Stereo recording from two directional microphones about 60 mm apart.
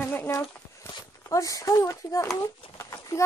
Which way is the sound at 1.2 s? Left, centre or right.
Left.